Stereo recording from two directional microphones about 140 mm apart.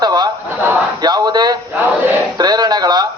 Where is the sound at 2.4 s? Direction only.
30° right (ahead or behind).